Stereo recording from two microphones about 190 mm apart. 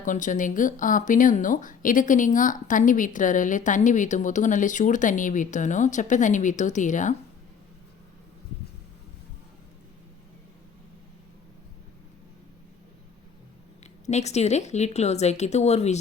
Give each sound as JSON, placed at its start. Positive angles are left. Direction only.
{"t": 0.0, "sound": "speech", "side_deg": 45}
{"t": 14.1, "sound": "speech", "side_deg": 35}